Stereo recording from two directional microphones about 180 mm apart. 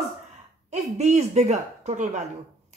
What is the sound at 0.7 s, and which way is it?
Speech, 40° right (ahead or behind).